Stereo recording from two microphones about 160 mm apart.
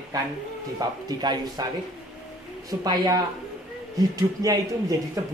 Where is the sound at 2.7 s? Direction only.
25° right (ahead or behind).